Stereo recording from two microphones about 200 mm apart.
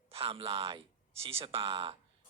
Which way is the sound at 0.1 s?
30° right (ahead or behind).